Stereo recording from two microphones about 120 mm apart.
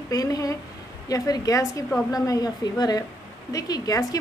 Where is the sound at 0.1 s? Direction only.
30° left (ahead or behind).